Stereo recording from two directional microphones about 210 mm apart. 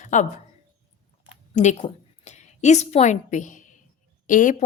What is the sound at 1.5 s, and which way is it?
A woman's voice, 30° left (ahead or behind).